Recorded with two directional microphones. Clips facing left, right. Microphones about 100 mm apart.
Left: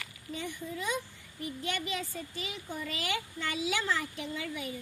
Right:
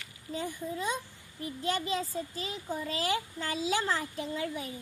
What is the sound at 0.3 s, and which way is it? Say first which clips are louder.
Speech: right 3 dB; 35° right (ahead or behind).